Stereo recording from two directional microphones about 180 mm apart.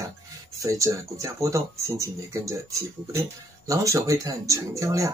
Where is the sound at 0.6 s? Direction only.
15° right (ahead or behind).